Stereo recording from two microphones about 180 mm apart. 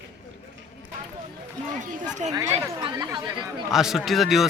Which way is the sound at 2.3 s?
15° right (ahead or behind).